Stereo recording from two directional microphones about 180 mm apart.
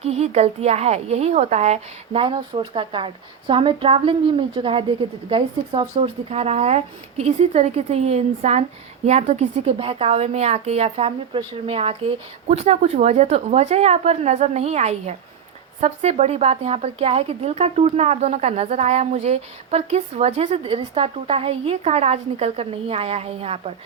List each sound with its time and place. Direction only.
0.0 s a woman's voice: 35° right (ahead or behind)